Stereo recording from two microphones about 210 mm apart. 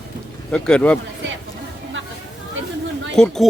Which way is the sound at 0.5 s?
5° left (ahead or behind).